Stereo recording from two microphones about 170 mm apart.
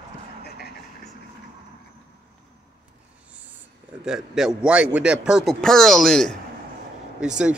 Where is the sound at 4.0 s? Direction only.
5° right (ahead or behind).